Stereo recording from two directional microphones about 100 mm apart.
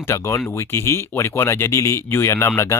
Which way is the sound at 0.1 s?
30° left (ahead or behind).